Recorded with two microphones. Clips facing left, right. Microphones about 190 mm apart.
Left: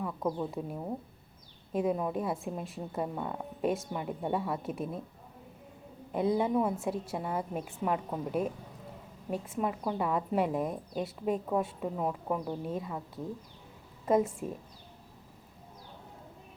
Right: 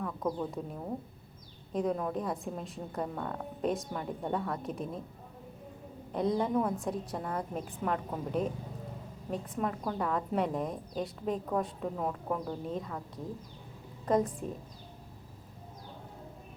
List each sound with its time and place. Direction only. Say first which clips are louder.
0.0 s a woman's voice: left 1 dB; 5° left (ahead or behind)
6.1 s a woman's voice: left 1 dB; 5° left (ahead or behind)